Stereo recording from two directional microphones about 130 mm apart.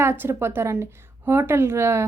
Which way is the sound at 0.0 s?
20° right (ahead or behind).